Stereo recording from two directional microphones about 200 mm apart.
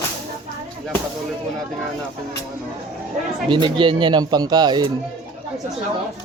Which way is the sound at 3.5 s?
25° right (ahead or behind).